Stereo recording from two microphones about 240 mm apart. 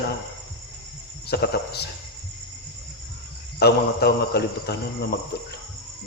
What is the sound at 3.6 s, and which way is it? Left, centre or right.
A man's voice, left.